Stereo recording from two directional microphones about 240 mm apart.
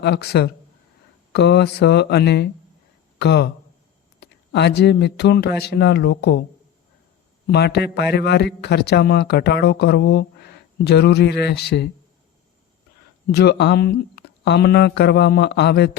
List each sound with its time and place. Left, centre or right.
0.0 s a man's voice: left
7.5 s a man's voice: left
13.3 s a man's voice: left